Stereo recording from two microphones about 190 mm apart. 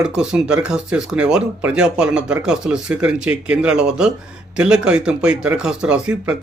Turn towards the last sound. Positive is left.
turn(degrees=-5)  # may be behind; listen again after turning